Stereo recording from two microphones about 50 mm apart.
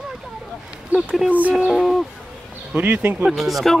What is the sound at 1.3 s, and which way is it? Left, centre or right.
Speech, right.